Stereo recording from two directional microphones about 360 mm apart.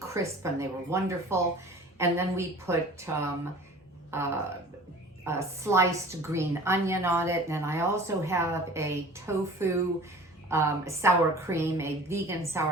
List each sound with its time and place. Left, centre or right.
0.0 s a woman's voice: centre
5.2 s a woman's voice: centre